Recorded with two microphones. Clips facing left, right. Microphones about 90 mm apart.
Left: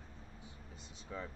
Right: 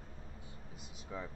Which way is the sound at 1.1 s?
15° right (ahead or behind).